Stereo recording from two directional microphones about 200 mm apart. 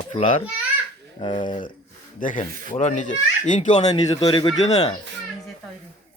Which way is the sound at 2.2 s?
40° left (ahead or behind).